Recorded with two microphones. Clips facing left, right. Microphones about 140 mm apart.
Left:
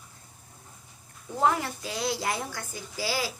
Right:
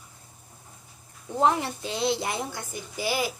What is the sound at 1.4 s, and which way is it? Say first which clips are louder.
A woman's voice: right 2 dB; 25° right (ahead or behind).